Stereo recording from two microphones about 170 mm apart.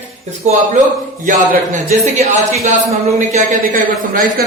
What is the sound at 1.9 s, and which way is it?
Speech, 40° right (ahead or behind).